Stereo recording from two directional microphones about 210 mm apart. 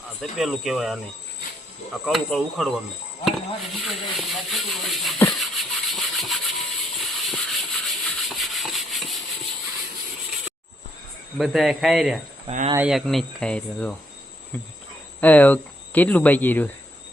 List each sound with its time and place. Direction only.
0.2 s speech: centre (ahead or behind)
5.4 s rub: centre (ahead or behind)
7.0 s sanding: centre (ahead or behind)
11.3 s speech: centre (ahead or behind)
12.5 s speech: 35° right (ahead or behind)
12.7 s speech: 5° right (ahead or behind)